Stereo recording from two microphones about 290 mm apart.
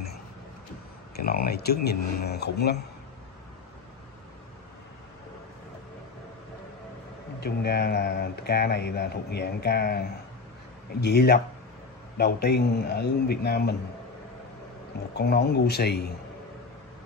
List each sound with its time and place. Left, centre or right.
1.1 s speech: left
7.3 s speech: left
15.1 s speech: left